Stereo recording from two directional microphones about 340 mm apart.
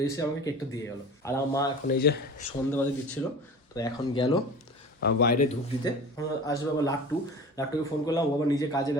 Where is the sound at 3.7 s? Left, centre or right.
Centre.